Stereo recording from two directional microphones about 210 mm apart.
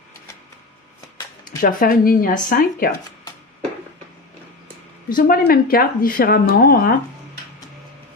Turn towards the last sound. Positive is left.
turn(degrees=45)  # may be behind; listen again after turning